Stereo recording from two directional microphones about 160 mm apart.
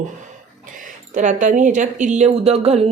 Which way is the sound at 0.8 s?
55° right (ahead or behind).